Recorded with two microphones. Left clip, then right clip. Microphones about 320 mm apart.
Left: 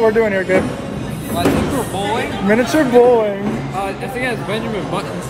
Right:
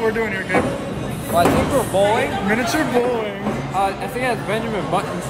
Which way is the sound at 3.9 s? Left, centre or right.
Right.